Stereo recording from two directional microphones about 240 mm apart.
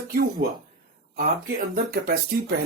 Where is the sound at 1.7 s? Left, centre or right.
Right.